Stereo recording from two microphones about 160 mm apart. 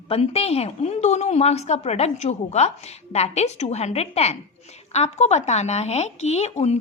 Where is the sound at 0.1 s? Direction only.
40° left (ahead or behind).